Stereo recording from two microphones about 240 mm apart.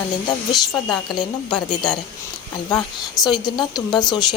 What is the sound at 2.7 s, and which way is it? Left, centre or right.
A woman's voice, centre.